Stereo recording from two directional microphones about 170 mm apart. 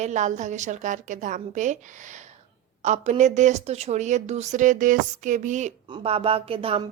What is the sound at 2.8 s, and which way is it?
A woman's voice, 45° right (ahead or behind).